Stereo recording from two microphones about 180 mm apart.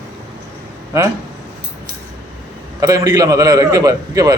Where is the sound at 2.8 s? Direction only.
20° right (ahead or behind).